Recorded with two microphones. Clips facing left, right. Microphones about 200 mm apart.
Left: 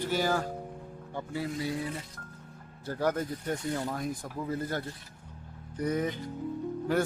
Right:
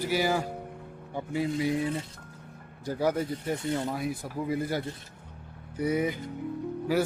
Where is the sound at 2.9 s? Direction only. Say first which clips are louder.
Right 2 dB; 10° right (ahead or behind).